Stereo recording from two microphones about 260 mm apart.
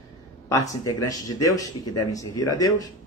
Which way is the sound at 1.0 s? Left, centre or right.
Centre.